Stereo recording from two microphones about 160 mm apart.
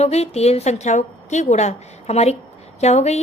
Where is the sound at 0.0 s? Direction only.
40° left (ahead or behind).